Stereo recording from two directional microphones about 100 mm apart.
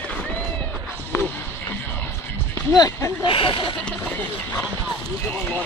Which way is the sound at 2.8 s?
30° left (ahead or behind).